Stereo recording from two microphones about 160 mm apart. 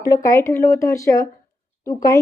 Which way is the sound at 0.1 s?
20° left (ahead or behind).